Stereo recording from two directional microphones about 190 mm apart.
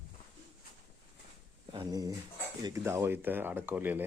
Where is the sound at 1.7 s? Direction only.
20° right (ahead or behind).